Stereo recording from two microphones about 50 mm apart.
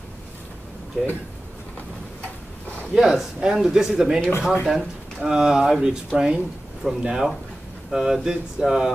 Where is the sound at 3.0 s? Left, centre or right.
Centre.